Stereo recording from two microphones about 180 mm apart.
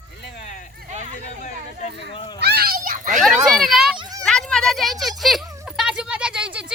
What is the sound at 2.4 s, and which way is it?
Cat, 60° right (ahead or behind).